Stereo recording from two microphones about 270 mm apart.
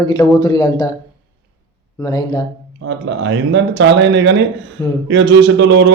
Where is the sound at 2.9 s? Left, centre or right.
Right.